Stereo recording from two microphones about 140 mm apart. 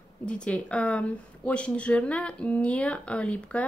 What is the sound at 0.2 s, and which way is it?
Speech, 5° left (ahead or behind).